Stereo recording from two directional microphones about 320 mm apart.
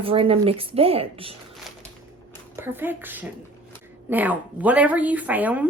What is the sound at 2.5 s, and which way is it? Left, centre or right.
A woman's voice, centre.